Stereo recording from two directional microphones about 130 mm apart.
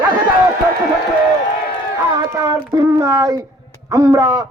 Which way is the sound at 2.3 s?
25° right (ahead or behind).